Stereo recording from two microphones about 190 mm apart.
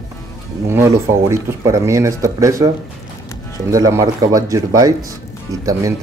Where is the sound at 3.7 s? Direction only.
20° right (ahead or behind).